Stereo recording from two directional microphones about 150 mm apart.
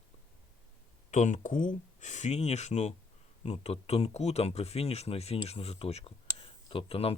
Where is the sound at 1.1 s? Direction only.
55° left (ahead or behind).